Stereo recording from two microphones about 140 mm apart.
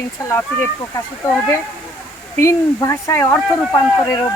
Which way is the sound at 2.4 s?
20° left (ahead or behind).